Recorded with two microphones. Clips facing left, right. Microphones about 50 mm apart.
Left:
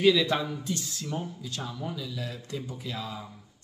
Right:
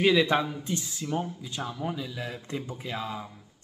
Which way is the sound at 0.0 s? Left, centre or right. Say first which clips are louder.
Right 1 dB; right.